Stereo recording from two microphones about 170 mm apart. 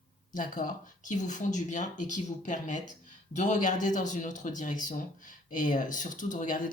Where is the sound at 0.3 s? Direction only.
50° left (ahead or behind).